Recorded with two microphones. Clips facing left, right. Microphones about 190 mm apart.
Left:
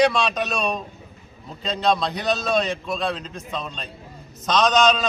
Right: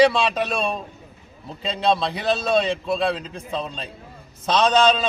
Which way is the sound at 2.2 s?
30° right (ahead or behind).